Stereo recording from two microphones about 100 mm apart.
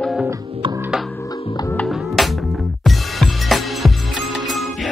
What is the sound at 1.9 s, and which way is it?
Music, centre (ahead or behind).